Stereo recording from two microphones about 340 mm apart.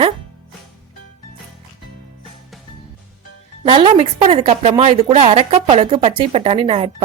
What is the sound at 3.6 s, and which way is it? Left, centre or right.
A woman's voice, centre.